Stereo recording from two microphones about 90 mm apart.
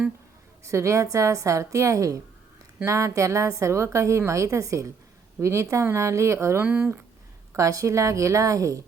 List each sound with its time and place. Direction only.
0.6 s a woman's voice: 35° right (ahead or behind)
6.6 s speech: 20° right (ahead or behind)
7.5 s a woman's voice: 35° right (ahead or behind)